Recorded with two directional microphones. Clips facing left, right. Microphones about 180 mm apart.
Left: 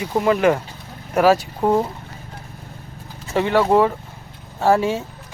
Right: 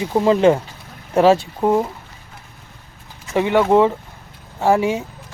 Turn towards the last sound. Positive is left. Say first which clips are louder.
# right 1 dB
turn(degrees=-15)  # may be behind; listen again after turning